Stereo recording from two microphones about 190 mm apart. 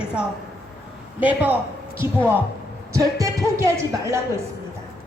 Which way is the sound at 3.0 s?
15° right (ahead or behind).